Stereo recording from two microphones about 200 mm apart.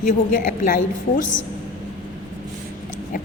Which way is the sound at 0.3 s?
45° left (ahead or behind).